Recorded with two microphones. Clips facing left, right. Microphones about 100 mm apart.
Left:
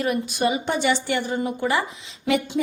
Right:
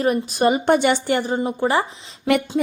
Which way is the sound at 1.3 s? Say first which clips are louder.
Right 2 dB; 35° right (ahead or behind).